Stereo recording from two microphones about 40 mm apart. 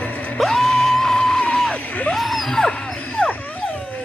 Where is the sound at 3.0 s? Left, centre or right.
Left.